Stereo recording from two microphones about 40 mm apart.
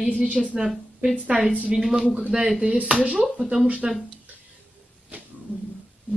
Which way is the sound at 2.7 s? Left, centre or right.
Right.